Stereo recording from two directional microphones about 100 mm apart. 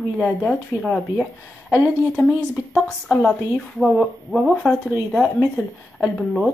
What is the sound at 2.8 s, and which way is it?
Speech, 5° left (ahead or behind).